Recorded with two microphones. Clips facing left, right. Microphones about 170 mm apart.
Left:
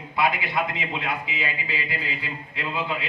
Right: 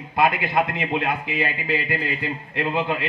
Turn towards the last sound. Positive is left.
turn(degrees=-60)  # may be behind; listen again after turning